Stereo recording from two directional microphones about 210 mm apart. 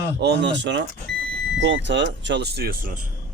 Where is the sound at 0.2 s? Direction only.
55° right (ahead or behind).